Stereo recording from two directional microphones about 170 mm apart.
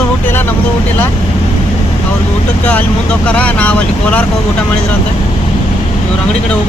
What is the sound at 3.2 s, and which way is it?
Speech, 5° left (ahead or behind).